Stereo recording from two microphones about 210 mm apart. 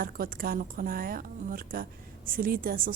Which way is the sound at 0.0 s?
45° right (ahead or behind).